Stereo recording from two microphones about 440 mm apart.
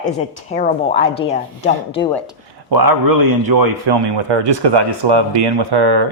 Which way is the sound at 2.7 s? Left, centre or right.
Right.